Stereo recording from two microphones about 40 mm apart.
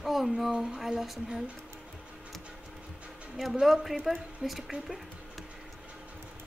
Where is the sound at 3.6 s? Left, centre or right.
Centre.